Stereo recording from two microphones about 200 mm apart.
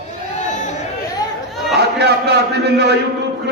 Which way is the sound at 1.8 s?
55° right (ahead or behind).